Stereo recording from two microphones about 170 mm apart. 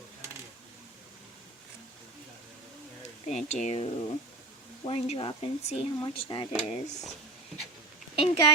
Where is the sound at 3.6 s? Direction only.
35° left (ahead or behind).